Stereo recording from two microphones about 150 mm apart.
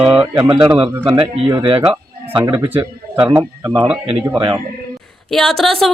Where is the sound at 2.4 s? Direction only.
25° right (ahead or behind).